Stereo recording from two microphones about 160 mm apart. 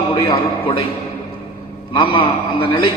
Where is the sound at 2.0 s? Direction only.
30° left (ahead or behind).